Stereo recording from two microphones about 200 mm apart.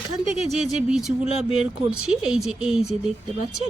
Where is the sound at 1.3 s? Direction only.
30° left (ahead or behind).